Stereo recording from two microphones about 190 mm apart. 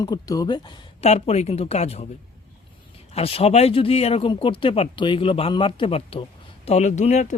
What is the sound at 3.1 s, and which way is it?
Speech, 30° left (ahead or behind).